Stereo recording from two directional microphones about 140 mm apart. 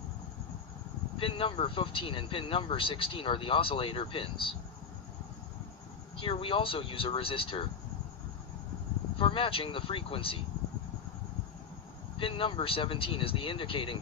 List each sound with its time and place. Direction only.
1.1 s speech: 40° left (ahead or behind)
6.1 s speech: 40° left (ahead or behind)
9.2 s speech: 40° left (ahead or behind)
12.2 s speech: 40° left (ahead or behind)